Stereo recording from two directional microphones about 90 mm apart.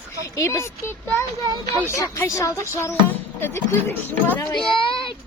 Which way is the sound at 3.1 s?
25° left (ahead or behind).